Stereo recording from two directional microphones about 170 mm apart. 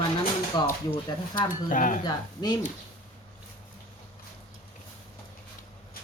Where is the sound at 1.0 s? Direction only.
25° left (ahead or behind).